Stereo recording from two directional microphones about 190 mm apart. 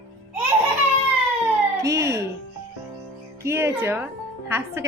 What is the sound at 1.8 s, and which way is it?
Speech, 15° right (ahead or behind).